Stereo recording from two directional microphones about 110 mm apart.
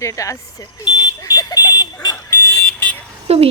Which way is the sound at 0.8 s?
40° left (ahead or behind).